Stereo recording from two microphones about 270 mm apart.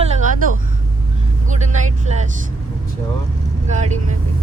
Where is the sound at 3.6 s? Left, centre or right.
Right.